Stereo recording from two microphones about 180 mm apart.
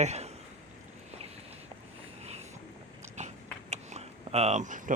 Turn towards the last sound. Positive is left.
turn(degrees=-45)  # may be behind; listen again after turning